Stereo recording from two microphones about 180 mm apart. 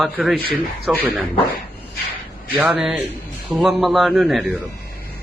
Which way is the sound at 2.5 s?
10° right (ahead or behind).